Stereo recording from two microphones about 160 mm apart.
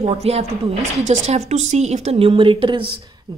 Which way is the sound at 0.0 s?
40° right (ahead or behind).